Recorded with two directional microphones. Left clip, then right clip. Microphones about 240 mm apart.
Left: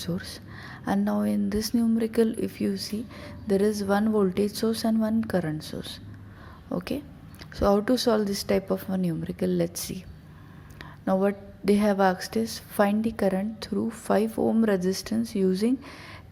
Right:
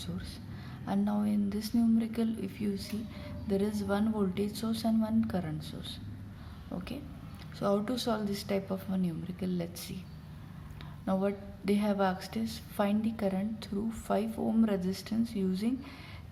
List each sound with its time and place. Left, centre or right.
0.0 s a woman's voice: left
11.0 s a woman's voice: left